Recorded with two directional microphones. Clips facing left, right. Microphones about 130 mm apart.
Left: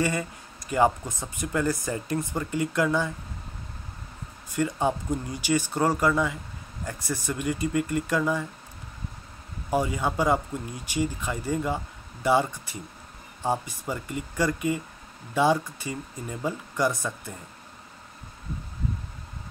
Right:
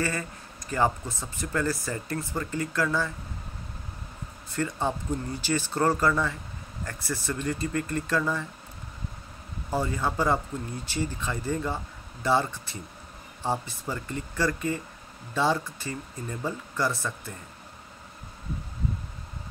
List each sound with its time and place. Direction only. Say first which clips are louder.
0.0 s speech: left 3 dB; 15° left (ahead or behind)
4.5 s speech: left 3 dB; 15° left (ahead or behind)
9.7 s speech: left 2 dB; 15° left (ahead or behind)